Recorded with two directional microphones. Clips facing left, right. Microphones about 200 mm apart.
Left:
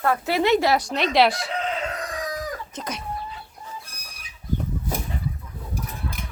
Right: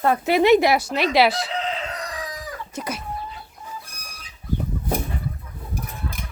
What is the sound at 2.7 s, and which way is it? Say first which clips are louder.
Speech: right 3 dB; 10° right (ahead or behind).